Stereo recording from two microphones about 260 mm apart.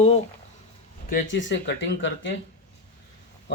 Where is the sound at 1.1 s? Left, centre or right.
Left.